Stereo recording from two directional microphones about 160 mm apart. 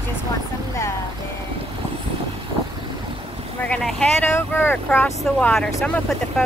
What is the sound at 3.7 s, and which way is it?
Speech, 5° left (ahead or behind).